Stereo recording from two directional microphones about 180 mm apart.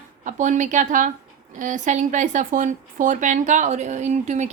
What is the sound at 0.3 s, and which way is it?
A woman's voice, 45° right (ahead or behind).